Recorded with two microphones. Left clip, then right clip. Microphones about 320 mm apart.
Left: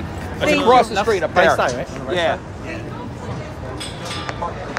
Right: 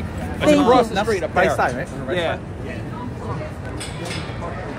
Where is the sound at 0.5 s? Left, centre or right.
Left.